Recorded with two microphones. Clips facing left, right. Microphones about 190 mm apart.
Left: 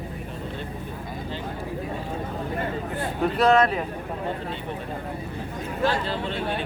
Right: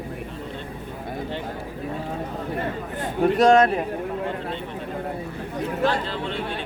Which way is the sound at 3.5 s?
45° right (ahead or behind).